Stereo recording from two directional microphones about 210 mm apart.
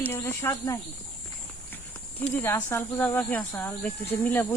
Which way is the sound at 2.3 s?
10° left (ahead or behind).